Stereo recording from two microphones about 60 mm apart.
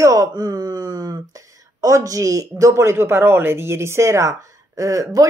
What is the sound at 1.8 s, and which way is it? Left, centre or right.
Speech, right.